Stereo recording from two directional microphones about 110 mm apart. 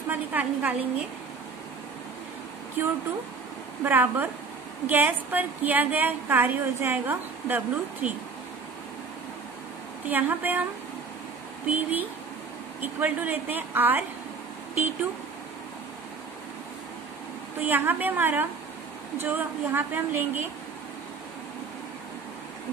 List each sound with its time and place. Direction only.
0.1 s a woman's voice: 15° right (ahead or behind)
2.8 s a woman's voice: 20° right (ahead or behind)
10.0 s a woman's voice: 15° right (ahead or behind)
11.6 s a woman's voice: 15° right (ahead or behind)
17.6 s a woman's voice: 20° right (ahead or behind)